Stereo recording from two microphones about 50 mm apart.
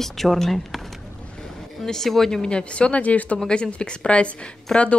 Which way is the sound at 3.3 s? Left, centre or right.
Centre.